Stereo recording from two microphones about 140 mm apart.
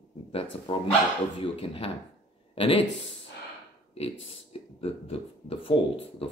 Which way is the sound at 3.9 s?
45° left (ahead or behind).